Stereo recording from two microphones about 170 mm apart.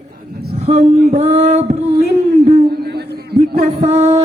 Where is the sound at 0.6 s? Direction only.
40° right (ahead or behind).